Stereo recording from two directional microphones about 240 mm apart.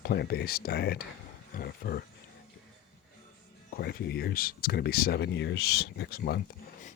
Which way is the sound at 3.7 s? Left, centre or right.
Left.